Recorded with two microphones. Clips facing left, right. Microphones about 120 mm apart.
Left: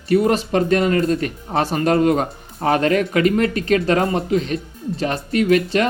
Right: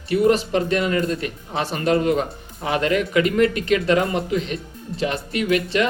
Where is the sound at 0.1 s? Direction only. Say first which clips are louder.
Left 1 dB; 40° left (ahead or behind).